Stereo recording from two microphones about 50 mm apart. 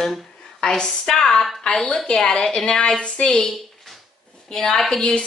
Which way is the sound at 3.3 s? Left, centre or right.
Centre.